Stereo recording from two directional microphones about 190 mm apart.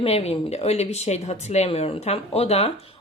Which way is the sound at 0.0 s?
30° left (ahead or behind).